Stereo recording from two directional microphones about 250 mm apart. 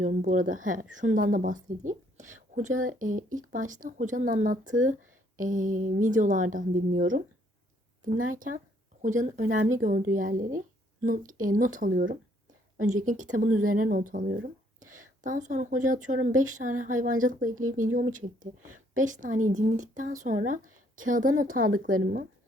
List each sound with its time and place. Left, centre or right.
0.0 s speech: right
8.4 s speech: right